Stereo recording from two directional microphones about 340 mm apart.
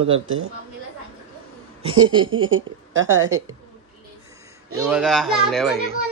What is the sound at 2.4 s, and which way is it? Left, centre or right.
Speech, right.